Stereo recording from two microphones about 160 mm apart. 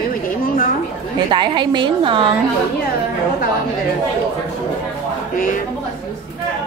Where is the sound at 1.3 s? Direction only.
30° right (ahead or behind).